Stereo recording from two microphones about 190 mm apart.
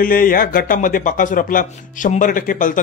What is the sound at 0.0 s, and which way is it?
Speech, 50° left (ahead or behind).